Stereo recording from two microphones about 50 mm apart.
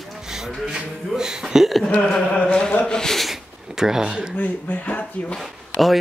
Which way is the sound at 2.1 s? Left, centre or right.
Left.